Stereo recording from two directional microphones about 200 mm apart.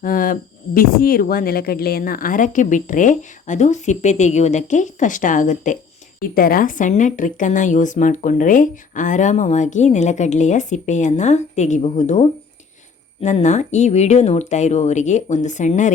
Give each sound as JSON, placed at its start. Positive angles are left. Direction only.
{"t": 0.0, "sound": "speech", "side_deg": 45}